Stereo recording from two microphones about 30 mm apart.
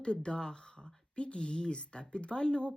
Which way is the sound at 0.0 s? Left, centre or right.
Left.